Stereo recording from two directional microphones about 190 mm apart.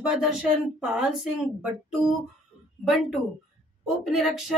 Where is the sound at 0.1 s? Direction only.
5° right (ahead or behind).